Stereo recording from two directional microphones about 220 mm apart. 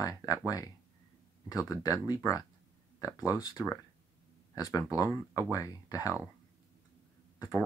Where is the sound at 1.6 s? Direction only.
15° left (ahead or behind).